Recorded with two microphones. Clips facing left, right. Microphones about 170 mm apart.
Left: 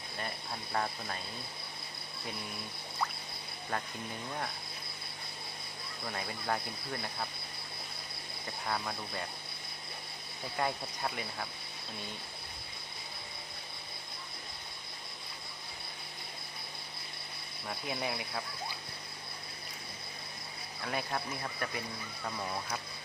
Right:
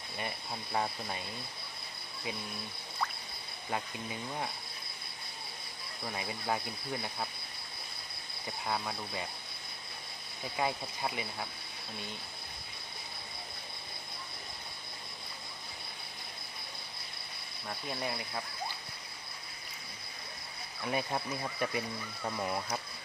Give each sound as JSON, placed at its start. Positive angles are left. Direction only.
{"t": 0.7, "sound": "speech", "side_deg": -10}
{"t": 3.7, "sound": "speech", "side_deg": -10}
{"t": 6.1, "sound": "speech", "side_deg": -10}
{"t": 8.6, "sound": "speech", "side_deg": -5}
{"t": 10.6, "sound": "speech", "side_deg": -5}
{"t": 17.7, "sound": "speech", "side_deg": 5}
{"t": 20.8, "sound": "speech", "side_deg": -20}